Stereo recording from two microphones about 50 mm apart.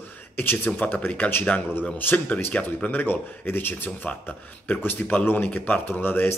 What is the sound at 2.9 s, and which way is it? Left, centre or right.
A man's voice, left.